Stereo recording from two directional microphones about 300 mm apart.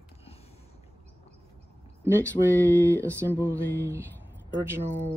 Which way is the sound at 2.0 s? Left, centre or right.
Centre.